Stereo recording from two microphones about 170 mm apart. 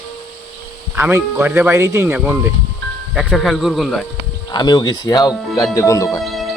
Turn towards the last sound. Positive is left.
turn(degrees=0)  # may be behind; listen again after turning